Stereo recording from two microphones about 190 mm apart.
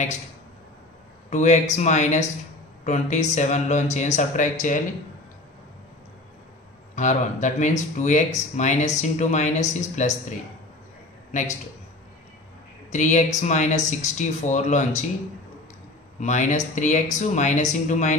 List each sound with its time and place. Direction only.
1.3 s speech: 40° left (ahead or behind)
7.0 s speech: 40° left (ahead or behind)
12.9 s speech: 40° left (ahead or behind)
16.2 s speech: 40° left (ahead or behind)